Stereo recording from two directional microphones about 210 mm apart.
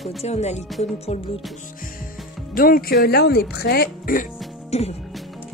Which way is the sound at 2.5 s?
45° left (ahead or behind).